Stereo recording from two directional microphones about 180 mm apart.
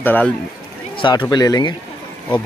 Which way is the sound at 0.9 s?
25° left (ahead or behind).